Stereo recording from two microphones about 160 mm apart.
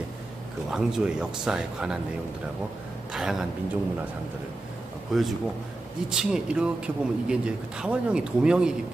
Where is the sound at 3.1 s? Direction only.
Centre (ahead or behind).